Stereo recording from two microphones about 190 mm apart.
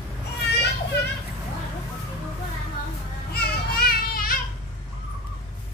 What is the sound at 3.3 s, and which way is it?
Children playing, 55° left (ahead or behind).